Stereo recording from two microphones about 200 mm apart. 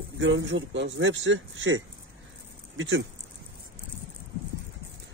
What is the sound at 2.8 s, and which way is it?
Speech, 75° right (ahead or behind).